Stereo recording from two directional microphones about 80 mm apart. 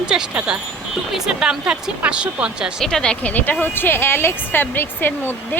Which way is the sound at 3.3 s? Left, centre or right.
Left.